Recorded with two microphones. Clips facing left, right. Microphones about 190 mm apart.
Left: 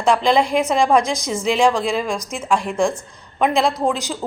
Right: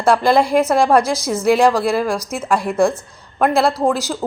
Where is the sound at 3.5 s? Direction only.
15° left (ahead or behind).